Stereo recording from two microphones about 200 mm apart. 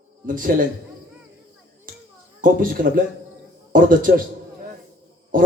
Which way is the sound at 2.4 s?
45° right (ahead or behind).